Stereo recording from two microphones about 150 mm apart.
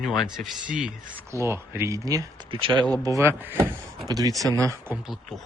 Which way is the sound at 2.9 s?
25° right (ahead or behind).